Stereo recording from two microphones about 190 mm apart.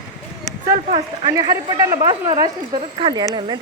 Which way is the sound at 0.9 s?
35° right (ahead or behind).